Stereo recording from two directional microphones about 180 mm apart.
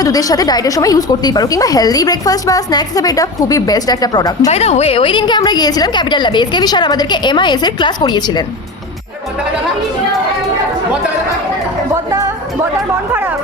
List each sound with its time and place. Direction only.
0.0 s a woman's voice: 20° left (ahead or behind)
4.4 s a woman's voice: 35° left (ahead or behind)